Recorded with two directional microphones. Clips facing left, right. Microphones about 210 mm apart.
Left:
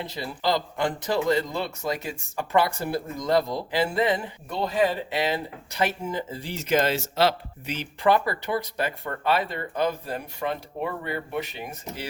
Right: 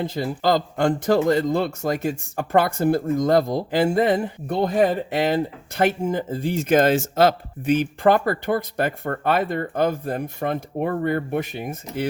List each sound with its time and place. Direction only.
0.0 s speech: 50° right (ahead or behind)